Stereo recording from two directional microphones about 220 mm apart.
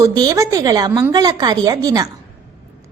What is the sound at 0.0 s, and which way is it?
A woman's voice, 20° right (ahead or behind).